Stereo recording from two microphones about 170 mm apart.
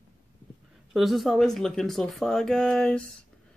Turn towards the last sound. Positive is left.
turn(degrees=5)  # may be behind; listen again after turning